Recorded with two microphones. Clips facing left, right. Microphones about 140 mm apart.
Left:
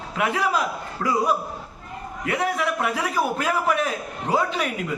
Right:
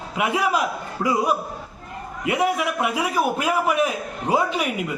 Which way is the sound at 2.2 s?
15° right (ahead or behind).